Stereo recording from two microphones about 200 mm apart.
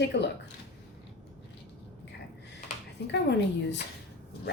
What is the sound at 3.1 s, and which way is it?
Speech, 60° left (ahead or behind).